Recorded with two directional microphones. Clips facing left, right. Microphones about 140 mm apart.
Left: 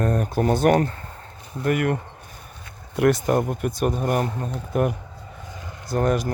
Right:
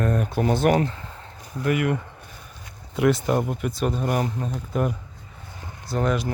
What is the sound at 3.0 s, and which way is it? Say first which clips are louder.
A man's voice: left 2 dB; 50° left (ahead or behind).